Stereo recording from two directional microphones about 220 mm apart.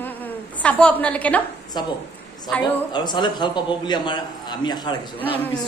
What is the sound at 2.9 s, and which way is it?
A man's voice, 20° left (ahead or behind).